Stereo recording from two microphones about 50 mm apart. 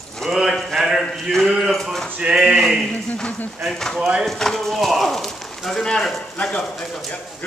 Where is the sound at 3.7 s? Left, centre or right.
Centre.